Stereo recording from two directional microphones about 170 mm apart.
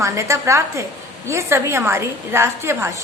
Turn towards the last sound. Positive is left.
turn(degrees=-15)  # may be behind; listen again after turning